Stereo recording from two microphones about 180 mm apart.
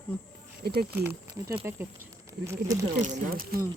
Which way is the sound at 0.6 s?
60° right (ahead or behind).